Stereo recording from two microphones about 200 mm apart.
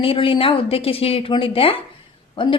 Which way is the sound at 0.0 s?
25° left (ahead or behind).